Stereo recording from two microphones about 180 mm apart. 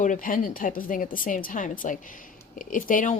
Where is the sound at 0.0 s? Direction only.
45° left (ahead or behind).